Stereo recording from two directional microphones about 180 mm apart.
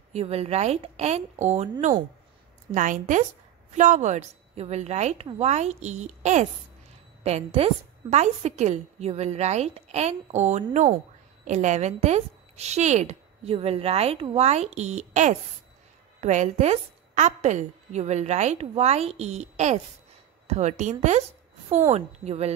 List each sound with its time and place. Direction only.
0.1 s a woman's voice: 35° right (ahead or behind)